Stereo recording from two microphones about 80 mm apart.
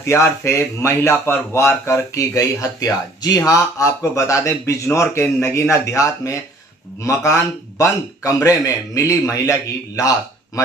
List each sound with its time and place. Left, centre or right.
0.0 s a man's voice: left